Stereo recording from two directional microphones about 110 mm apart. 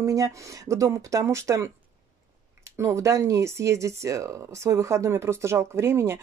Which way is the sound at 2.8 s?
25° right (ahead or behind).